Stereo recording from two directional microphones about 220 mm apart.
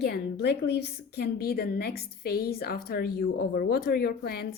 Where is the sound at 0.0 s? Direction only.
50° left (ahead or behind).